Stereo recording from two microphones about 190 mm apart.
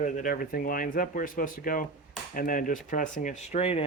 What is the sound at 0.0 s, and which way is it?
Speech, 45° left (ahead or behind).